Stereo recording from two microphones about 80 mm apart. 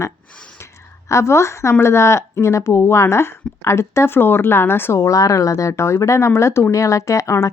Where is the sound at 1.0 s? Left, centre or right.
Left.